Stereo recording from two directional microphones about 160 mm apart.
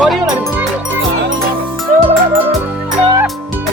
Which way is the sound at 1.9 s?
55° right (ahead or behind).